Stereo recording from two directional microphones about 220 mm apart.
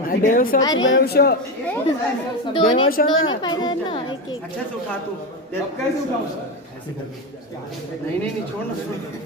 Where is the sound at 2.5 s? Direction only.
20° left (ahead or behind).